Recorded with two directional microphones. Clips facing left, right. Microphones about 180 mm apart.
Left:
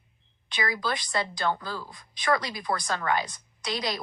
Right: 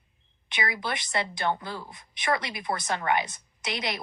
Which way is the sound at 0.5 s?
25° right (ahead or behind).